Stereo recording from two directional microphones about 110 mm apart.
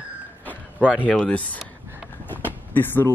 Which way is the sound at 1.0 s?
10° left (ahead or behind).